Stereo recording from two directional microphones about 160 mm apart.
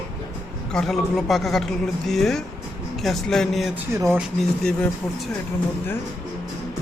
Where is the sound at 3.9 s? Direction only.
20° right (ahead or behind).